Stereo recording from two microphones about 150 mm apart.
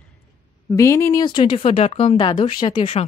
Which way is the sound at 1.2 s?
30° left (ahead or behind).